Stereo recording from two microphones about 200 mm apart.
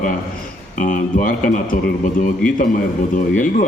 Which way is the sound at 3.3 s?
40° left (ahead or behind).